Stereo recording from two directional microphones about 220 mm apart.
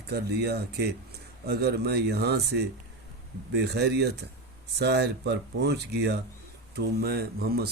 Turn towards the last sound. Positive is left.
turn(degrees=-45)  # may be behind; listen again after turning